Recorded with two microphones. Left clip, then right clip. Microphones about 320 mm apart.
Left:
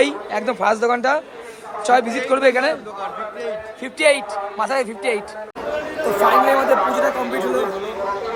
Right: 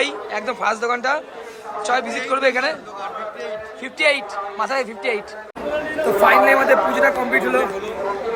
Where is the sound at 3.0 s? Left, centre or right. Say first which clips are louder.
Left 1 dB; centre.